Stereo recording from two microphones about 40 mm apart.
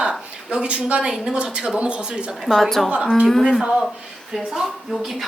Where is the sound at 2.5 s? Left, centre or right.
Centre.